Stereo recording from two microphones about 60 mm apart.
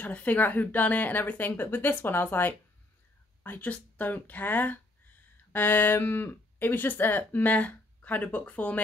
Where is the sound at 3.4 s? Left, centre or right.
Left.